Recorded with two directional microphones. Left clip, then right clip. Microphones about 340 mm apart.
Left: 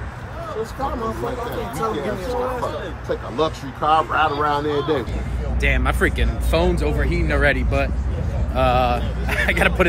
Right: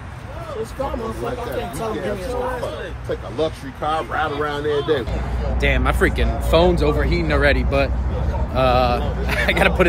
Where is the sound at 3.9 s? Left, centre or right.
Centre.